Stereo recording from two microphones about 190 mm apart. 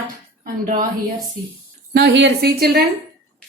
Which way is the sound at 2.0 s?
60° right (ahead or behind).